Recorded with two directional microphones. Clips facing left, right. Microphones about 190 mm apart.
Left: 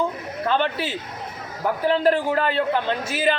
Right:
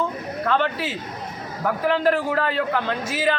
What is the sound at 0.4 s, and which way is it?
Speech, 30° left (ahead or behind).